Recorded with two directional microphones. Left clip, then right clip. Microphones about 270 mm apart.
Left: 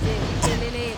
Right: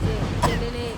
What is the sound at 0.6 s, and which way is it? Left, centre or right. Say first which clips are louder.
Speech: left 2 dB; centre.